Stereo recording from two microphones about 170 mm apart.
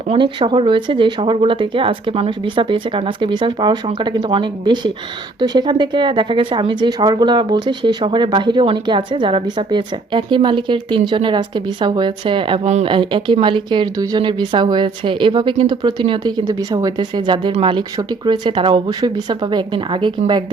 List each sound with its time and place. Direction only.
0.1 s speech: 30° right (ahead or behind)